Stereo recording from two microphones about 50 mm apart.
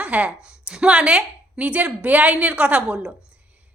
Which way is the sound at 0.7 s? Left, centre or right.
Centre.